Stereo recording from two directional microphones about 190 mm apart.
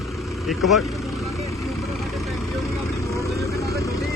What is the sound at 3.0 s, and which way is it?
Vehicle, 15° left (ahead or behind).